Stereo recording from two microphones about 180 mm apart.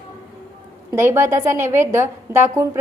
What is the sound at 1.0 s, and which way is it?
A woman's voice, 15° right (ahead or behind).